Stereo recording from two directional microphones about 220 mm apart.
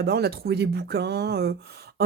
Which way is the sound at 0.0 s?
45° right (ahead or behind).